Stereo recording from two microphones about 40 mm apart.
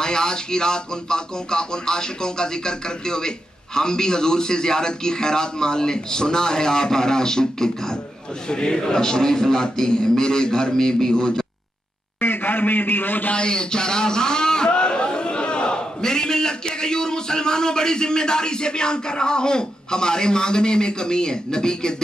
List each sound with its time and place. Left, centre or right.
0.0 s speech: centre
12.2 s a man's voice: left
13.3 s a man's voice: left